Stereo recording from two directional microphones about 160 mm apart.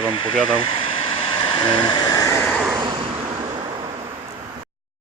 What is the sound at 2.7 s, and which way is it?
Vehicle, 25° right (ahead or behind).